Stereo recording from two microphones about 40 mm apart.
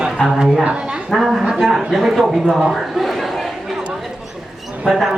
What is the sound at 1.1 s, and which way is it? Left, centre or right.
Speech, centre.